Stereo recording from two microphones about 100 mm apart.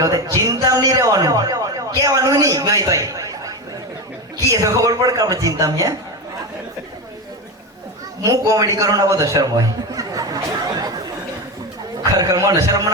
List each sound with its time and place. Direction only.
0.0 s a man's voice: 35° right (ahead or behind)
4.6 s speech: 35° right (ahead or behind)
8.2 s a man's voice: 35° right (ahead or behind)
12.2 s speech: 35° right (ahead or behind)